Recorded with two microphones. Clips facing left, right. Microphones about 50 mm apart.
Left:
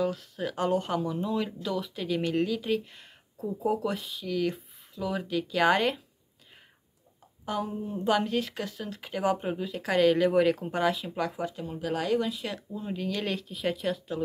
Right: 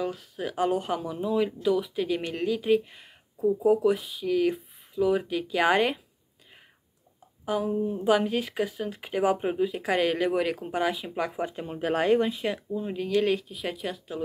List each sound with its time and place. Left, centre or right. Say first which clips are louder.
0.0 s speech: left 1 dB; centre
7.4 s speech: right 5 dB; centre; by 11.6 s right
11.6 s speech: right 6 dB; right
12.5 s speech: right 4 dB; centre